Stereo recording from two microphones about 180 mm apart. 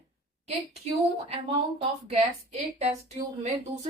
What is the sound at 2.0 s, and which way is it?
Speech, 35° right (ahead or behind).